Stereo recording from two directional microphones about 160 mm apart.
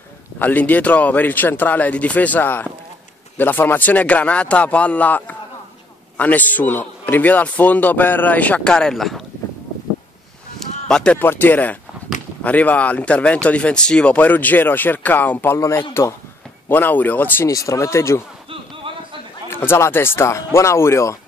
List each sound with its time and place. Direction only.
0.4 s speech: 10° left (ahead or behind)
10.9 s speech: 5° left (ahead or behind)
18.5 s a sound: 35° right (ahead or behind)
19.5 s speech: 15° left (ahead or behind)